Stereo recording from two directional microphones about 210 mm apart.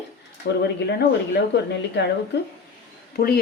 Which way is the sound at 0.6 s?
55° left (ahead or behind).